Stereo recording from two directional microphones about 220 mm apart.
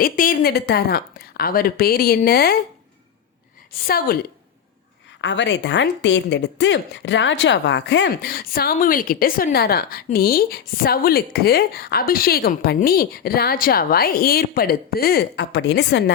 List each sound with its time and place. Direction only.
0.0 s a woman's voice: 40° left (ahead or behind)
3.7 s a woman's voice: 40° left (ahead or behind)
5.2 s a woman's voice: 55° left (ahead or behind)